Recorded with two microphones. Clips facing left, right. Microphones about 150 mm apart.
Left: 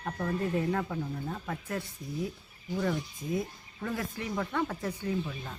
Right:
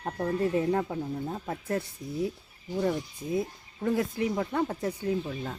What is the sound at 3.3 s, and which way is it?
Speech, 25° right (ahead or behind).